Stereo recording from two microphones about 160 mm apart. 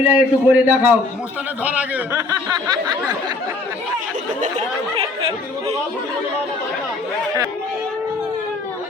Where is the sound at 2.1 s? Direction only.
25° right (ahead or behind).